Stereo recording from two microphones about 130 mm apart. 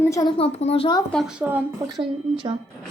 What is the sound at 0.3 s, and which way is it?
Speech, 50° left (ahead or behind).